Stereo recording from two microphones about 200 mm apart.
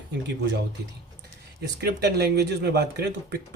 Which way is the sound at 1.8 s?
55° right (ahead or behind).